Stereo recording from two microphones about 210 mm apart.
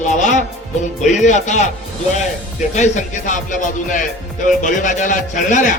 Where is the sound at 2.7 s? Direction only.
35° left (ahead or behind).